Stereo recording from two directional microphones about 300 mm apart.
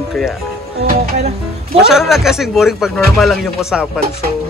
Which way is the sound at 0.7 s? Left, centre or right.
Right.